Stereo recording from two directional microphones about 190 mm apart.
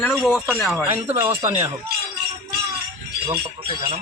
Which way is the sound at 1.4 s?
25° right (ahead or behind).